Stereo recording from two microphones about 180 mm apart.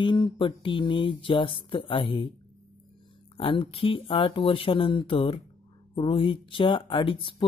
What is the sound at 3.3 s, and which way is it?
Speech, 30° left (ahead or behind).